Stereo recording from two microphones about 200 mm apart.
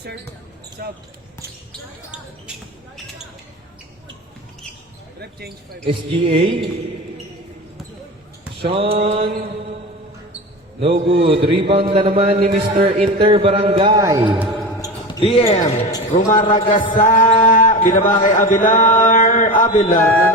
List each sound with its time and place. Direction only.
0.8 s speech: 50° right (ahead or behind)
5.8 s a man's voice: 30° right (ahead or behind)
8.7 s a man's voice: 30° right (ahead or behind)
10.8 s a man's voice: 30° right (ahead or behind)
14.3 s basketball bounce: centre (ahead or behind)
14.8 s basketball bounce: 15° left (ahead or behind)
15.2 s a man's voice: 30° left (ahead or behind)